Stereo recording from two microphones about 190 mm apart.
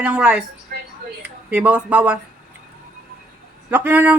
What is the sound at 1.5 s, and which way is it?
Speech, 10° right (ahead or behind).